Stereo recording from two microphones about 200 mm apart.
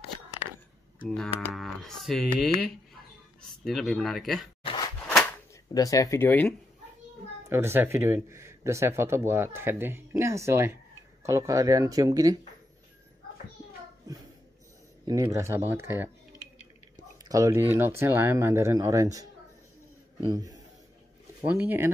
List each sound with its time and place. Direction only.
1.0 s speech: 5° left (ahead or behind)
5.0 s a sound: 5° left (ahead or behind)
5.7 s speech: 15° left (ahead or behind)
7.4 s speech: 10° right (ahead or behind)
15.0 s speech: 20° right (ahead or behind)
17.2 s speech: 15° right (ahead or behind)
20.2 s a man's voice: 20° right (ahead or behind)